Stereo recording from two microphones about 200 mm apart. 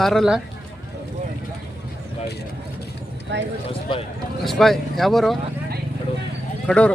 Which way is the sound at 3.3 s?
60° right (ahead or behind).